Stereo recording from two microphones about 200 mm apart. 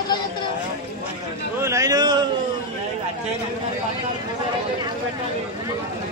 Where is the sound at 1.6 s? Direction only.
15° right (ahead or behind).